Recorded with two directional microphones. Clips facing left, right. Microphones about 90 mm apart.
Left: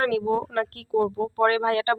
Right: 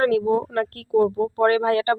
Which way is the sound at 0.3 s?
20° right (ahead or behind).